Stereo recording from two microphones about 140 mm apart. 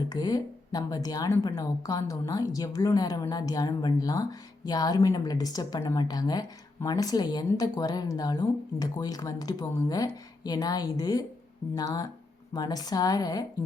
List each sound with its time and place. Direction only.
0.1 s speech: 30° left (ahead or behind)